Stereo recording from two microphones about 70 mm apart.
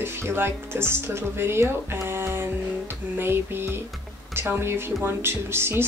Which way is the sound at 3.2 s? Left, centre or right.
Right.